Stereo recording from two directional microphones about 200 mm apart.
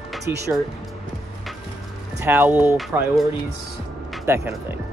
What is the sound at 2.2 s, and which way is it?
Speech, 10° right (ahead or behind).